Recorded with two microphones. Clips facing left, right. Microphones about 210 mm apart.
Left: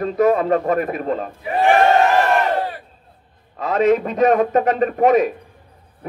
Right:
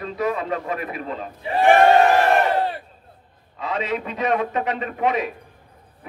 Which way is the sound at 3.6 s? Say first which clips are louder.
Left 10 dB; 45° left (ahead or behind).